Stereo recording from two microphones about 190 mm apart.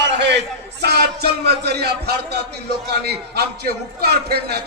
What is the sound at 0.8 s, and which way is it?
A man's voice, 60° right (ahead or behind).